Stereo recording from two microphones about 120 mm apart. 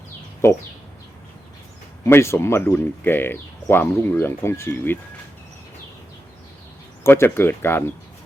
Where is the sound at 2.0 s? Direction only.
20° left (ahead or behind).